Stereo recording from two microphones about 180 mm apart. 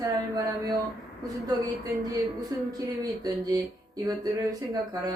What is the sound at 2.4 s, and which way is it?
Speech, 20° right (ahead or behind).